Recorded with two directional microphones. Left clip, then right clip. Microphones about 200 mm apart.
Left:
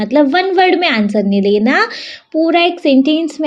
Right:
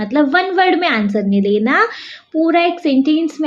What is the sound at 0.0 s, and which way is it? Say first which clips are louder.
A woman's voice: left 3 dB; 35° left (ahead or behind).